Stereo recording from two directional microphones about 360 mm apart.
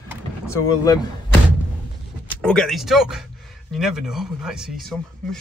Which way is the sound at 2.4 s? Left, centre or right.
Centre.